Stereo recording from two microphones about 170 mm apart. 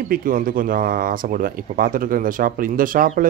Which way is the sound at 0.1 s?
55° right (ahead or behind).